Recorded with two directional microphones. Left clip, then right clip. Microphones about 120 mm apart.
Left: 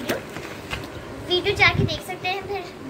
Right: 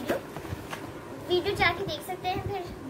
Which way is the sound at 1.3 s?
20° right (ahead or behind).